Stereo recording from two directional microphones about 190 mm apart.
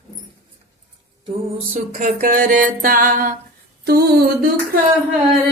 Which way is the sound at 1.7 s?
35° right (ahead or behind).